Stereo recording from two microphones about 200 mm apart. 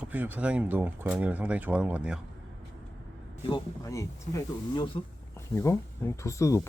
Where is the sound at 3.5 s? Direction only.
15° left (ahead or behind).